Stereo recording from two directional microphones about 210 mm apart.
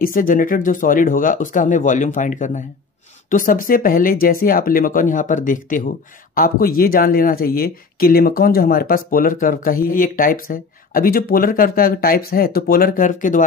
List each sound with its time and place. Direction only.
0.0 s speech: 40° left (ahead or behind)